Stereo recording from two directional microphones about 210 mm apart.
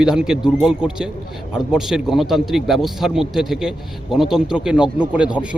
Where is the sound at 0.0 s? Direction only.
5° right (ahead or behind).